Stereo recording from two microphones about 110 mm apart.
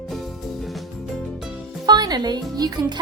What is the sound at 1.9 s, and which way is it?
Music, 40° right (ahead or behind).